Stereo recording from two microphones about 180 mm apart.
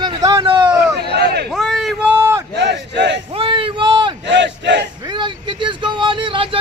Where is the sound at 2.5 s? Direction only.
70° right (ahead or behind).